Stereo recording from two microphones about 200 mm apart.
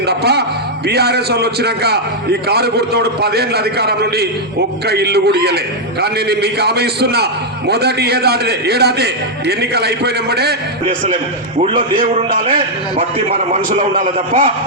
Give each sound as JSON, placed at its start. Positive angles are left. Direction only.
{"t": 0.1, "sound": "a man's voice", "side_deg": -55}
{"t": 10.8, "sound": "a man's voice", "side_deg": -25}
{"t": 11.9, "sound": "a man's voice", "side_deg": -45}